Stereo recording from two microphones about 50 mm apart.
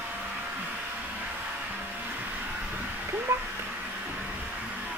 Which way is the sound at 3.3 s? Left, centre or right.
Right.